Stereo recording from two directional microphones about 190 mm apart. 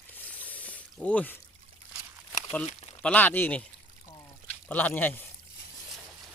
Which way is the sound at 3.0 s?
10° left (ahead or behind).